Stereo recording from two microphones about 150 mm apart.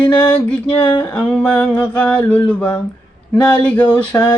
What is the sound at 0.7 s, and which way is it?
Speech, 30° left (ahead or behind).